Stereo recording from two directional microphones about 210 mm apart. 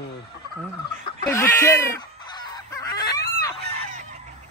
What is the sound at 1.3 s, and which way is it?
Fowl, 15° left (ahead or behind).